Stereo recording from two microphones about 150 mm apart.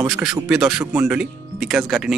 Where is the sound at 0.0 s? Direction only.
5° right (ahead or behind).